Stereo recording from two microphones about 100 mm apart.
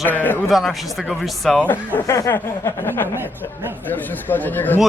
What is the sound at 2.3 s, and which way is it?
Speech, 20° left (ahead or behind).